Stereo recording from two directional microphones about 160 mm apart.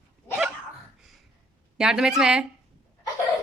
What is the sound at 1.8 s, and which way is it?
Speech, 5° right (ahead or behind).